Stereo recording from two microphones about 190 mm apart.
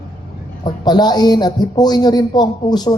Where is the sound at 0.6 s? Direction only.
20° left (ahead or behind).